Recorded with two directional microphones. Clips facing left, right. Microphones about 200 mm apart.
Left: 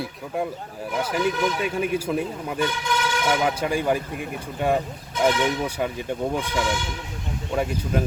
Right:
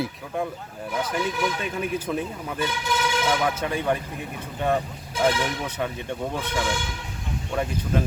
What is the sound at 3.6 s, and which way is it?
Speech, 10° left (ahead or behind).